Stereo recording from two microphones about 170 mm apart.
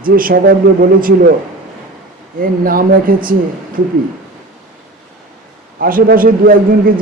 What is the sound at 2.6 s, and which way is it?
Speech, 55° right (ahead or behind).